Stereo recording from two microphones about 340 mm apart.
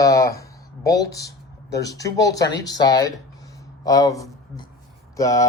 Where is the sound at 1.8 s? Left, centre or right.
Centre.